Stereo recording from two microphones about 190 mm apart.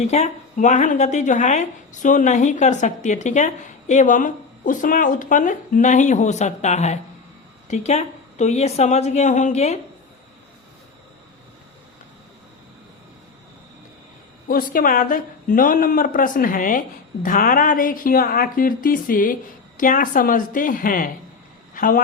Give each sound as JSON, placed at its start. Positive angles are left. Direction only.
{"t": 0.0, "sound": "a woman's voice", "side_deg": 35}
{"t": 14.4, "sound": "a woman's voice", "side_deg": 45}